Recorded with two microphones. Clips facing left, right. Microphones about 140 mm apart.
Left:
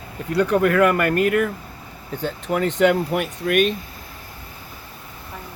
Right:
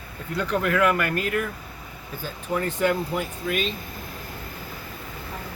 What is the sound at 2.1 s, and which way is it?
Speech, 75° left (ahead or behind).